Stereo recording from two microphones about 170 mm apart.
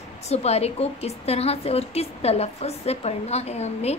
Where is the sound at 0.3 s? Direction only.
40° left (ahead or behind).